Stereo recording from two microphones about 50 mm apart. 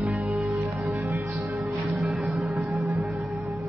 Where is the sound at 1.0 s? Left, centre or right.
Right.